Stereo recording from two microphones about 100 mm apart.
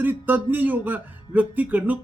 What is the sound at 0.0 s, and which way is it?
Speech, 20° right (ahead or behind).